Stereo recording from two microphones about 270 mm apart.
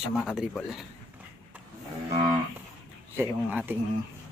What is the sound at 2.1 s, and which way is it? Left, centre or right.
Cattle, centre.